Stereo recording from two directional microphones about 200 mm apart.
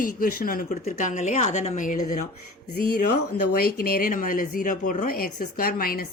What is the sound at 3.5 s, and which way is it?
Speech, 50° left (ahead or behind).